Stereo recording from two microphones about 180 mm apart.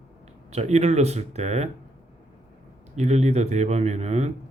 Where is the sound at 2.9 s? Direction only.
40° right (ahead or behind).